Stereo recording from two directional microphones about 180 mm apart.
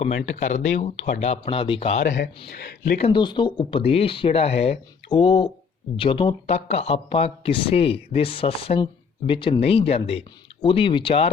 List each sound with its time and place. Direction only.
0.3 s speech: 40° left (ahead or behind)
2.5 s speech: 60° left (ahead or behind)
3.1 s speech: 25° left (ahead or behind)